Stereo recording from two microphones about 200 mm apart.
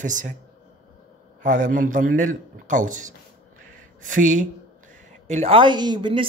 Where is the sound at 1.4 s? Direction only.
40° right (ahead or behind).